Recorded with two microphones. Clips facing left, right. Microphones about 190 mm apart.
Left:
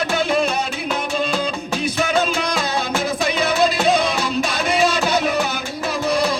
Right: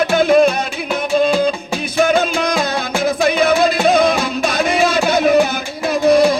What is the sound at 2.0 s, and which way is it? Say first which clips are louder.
Music: right 7 dB; 55° right (ahead or behind).